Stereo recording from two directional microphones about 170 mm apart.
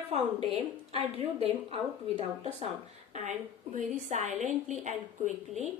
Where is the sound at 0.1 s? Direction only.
40° right (ahead or behind).